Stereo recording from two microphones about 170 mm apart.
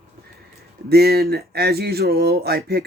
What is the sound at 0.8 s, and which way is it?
Speech, 65° right (ahead or behind).